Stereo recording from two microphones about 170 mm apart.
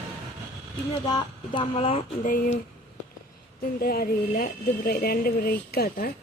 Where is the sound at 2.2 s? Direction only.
55° left (ahead or behind).